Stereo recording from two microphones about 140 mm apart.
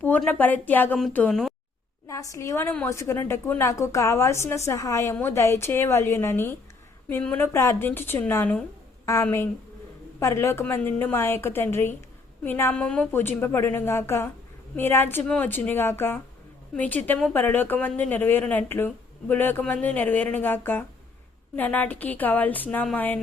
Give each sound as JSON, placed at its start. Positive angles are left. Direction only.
{"t": 0.3, "sound": "a woman's voice", "side_deg": 10}
{"t": 2.0, "sound": "a woman's voice", "side_deg": 20}